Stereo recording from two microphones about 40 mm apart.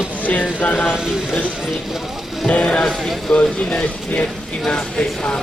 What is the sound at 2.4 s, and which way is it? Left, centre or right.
A man's voice, left.